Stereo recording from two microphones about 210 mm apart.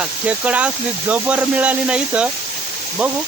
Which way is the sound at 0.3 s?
5° right (ahead or behind).